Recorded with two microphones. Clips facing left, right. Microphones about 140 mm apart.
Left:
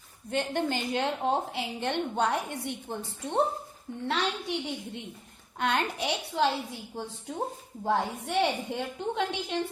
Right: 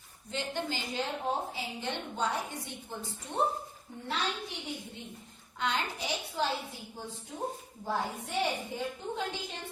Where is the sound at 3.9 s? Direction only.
85° left.